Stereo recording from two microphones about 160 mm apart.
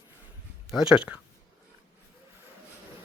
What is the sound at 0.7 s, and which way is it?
Speech, 5° right (ahead or behind).